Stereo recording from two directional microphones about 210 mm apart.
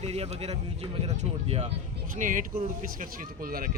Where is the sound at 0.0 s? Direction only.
30° right (ahead or behind).